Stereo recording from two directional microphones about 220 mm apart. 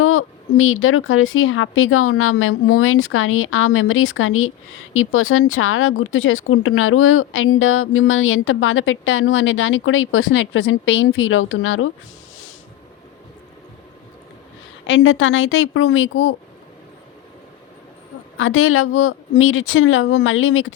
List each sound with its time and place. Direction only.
0.0 s speech: 70° left (ahead or behind)
14.8 s speech: 60° left (ahead or behind)
18.3 s speech: 65° left (ahead or behind)